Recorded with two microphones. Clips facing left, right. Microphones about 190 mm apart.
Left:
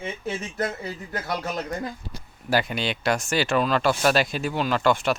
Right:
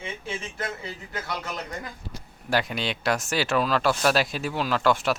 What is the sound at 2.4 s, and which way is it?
Speech, centre (ahead or behind).